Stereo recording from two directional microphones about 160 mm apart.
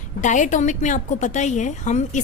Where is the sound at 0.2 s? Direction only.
50° left (ahead or behind).